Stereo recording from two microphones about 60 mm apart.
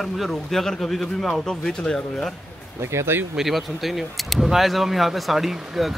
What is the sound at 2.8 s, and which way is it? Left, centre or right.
Speech, right.